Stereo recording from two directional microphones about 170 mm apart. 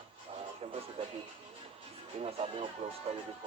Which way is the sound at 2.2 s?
35° right (ahead or behind).